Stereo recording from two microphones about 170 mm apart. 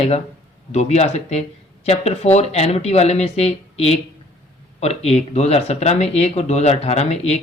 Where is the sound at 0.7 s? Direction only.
40° left (ahead or behind).